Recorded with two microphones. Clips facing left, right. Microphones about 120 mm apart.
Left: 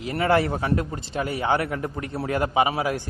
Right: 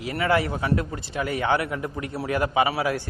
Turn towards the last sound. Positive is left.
turn(degrees=20)  # may be behind; listen again after turning